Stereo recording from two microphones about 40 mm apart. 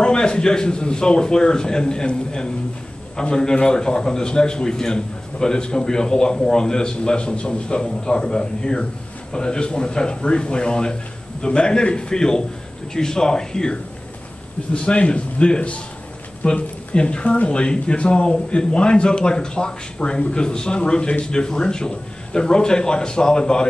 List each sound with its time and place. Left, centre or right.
0.0 s speech: left
14.7 s speech: left